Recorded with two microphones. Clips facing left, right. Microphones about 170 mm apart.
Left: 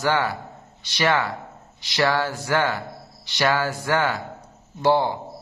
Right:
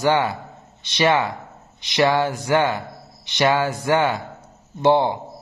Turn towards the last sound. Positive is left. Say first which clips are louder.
# right 3 dB
turn(degrees=-20)  # may be behind; listen again after turning